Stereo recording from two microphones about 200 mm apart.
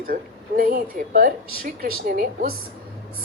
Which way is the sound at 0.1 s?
45° right (ahead or behind).